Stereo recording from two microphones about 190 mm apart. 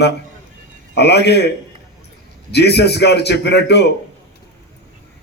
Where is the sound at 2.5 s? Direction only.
60° left (ahead or behind).